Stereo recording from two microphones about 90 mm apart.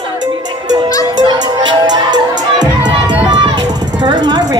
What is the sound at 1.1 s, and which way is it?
Music, 55° right (ahead or behind).